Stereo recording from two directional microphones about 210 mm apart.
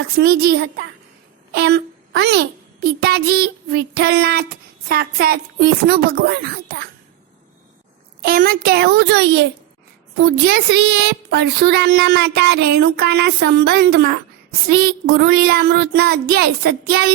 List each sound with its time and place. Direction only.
0.2 s a child's voice: 50° right (ahead or behind)
8.2 s a child's voice: 45° right (ahead or behind)
10.7 s a child's voice: 60° right (ahead or behind)